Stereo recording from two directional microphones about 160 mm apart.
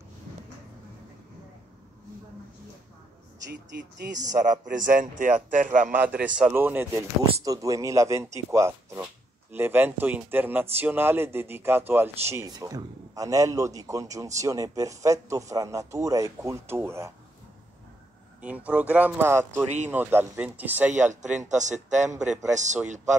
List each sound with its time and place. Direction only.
4.3 s speech: 55° right (ahead or behind)
6.0 s speech: 10° right (ahead or behind)
18.4 s speech: 10° right (ahead or behind)
21.8 s speech: 50° right (ahead or behind)